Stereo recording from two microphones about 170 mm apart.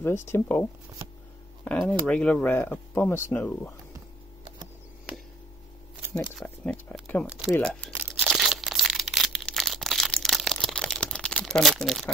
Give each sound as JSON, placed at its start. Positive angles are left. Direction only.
{"t": 0.0, "sound": "speech", "side_deg": 15}
{"t": 6.3, "sound": "speech", "side_deg": 10}
{"t": 8.3, "sound": "crumpling", "side_deg": 0}